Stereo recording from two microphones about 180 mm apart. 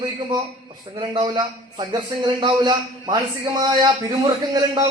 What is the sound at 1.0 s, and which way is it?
A man's voice, 25° right (ahead or behind).